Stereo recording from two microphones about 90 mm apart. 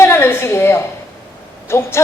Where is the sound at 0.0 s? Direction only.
30° left (ahead or behind).